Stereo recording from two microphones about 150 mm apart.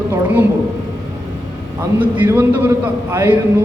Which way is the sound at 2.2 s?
15° right (ahead or behind).